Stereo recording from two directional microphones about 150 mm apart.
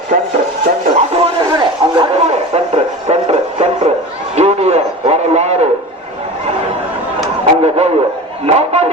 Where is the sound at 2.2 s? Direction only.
45° right (ahead or behind).